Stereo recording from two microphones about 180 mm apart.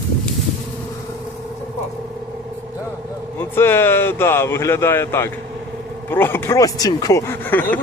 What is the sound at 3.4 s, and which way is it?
Speech, 15° left (ahead or behind).